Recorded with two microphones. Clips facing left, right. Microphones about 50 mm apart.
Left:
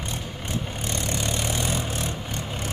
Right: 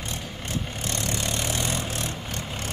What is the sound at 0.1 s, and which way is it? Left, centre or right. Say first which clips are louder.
Vehicle: even; centre.